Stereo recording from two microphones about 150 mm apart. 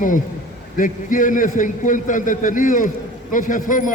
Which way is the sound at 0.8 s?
60° left (ahead or behind).